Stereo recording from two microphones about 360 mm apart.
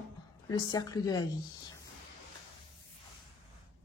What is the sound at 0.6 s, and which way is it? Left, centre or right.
Speech, centre.